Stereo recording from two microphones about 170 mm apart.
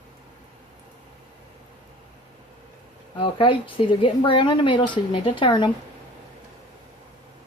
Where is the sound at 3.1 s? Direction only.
30° left (ahead or behind).